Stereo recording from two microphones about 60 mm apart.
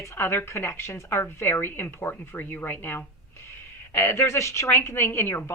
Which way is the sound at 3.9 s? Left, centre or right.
Left.